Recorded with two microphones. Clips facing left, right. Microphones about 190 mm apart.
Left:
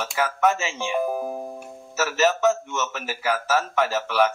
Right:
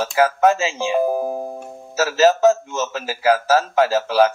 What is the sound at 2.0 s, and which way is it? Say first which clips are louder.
Speech: right 6 dB; 90° right.